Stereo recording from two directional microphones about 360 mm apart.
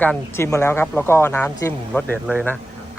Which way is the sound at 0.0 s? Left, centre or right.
Centre.